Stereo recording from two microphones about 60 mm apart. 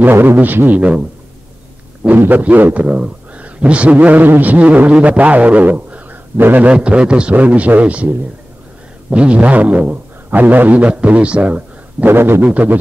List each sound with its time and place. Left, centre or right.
0.0 s a man's voice: right
2.0 s a man's voice: right
6.7 s a man's voice: centre
9.1 s a man's voice: centre
12.1 s a man's voice: right
12.4 s a man's voice: right